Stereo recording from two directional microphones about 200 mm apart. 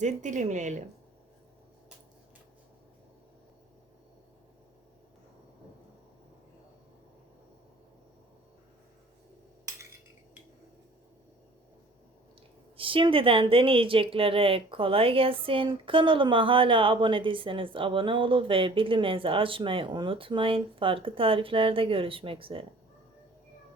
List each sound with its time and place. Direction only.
0.0 s speech: 35° right (ahead or behind)
12.7 s speech: 25° right (ahead or behind)